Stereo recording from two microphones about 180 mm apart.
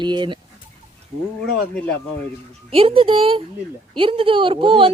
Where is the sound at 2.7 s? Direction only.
30° right (ahead or behind).